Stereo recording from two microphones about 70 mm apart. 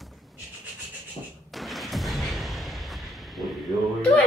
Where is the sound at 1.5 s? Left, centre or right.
Centre.